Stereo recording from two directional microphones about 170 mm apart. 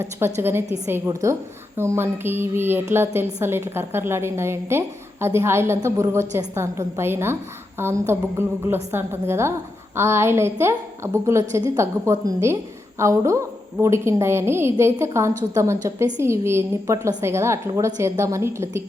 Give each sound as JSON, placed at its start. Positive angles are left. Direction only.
{"t": 0.0, "sound": "a woman's voice", "side_deg": -15}